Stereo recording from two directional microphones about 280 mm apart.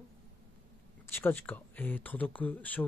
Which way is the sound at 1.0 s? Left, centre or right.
Centre.